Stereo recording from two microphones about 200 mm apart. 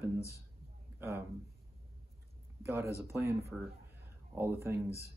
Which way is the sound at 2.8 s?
15° left (ahead or behind).